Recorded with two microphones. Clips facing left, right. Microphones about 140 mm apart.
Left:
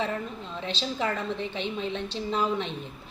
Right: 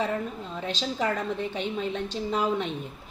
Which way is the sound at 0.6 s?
10° right (ahead or behind).